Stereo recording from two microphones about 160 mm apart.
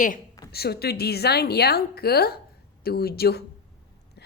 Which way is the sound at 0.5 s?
80° left.